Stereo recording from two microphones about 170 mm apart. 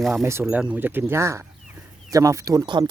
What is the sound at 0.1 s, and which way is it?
Speech, 15° right (ahead or behind).